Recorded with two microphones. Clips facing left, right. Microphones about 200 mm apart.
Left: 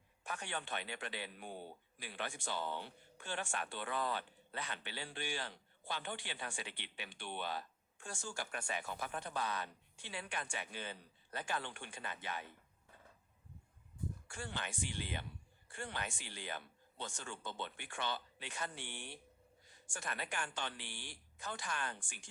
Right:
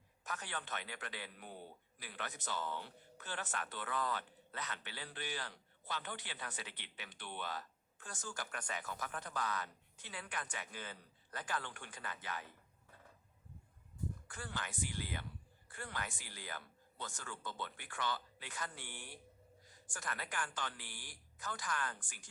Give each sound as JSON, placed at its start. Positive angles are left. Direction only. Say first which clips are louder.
{"t": 0.3, "sound": "a man's voice", "louder": "left 2 dB", "side_deg": 25}
{"t": 14.3, "sound": "a man's voice", "louder": "left 1 dB", "side_deg": 25}